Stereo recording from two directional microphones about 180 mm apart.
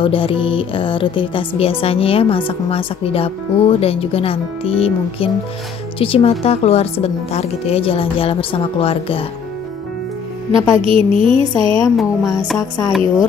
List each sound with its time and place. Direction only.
0.0 s speech: 30° left (ahead or behind)
10.5 s speech: centre (ahead or behind)
10.9 s speech: 30° right (ahead or behind)
12.0 s speech: centre (ahead or behind)